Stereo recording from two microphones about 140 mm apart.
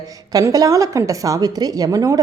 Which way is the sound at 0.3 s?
25° right (ahead or behind).